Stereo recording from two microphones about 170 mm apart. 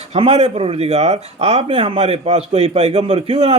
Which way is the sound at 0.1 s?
40° right (ahead or behind).